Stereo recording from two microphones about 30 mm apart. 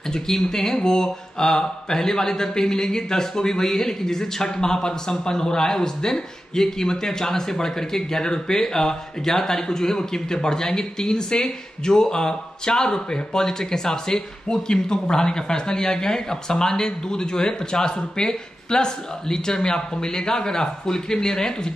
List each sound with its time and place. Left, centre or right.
0.1 s a man's voice: centre